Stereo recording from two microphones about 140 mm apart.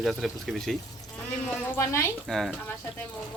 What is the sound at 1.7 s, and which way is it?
Speech, 20° left (ahead or behind).